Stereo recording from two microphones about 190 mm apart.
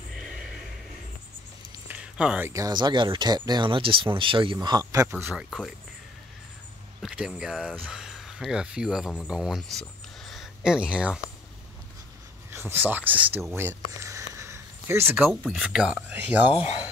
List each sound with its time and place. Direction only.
0.1 s a sound: centre (ahead or behind)
1.9 s speech: 5° right (ahead or behind)
5.1 s speech: 5° right (ahead or behind)
7.0 s speech: centre (ahead or behind)
12.4 s speech: 10° right (ahead or behind)
13.6 s a sound: 15° right (ahead or behind)
15.2 s speech: 5° right (ahead or behind)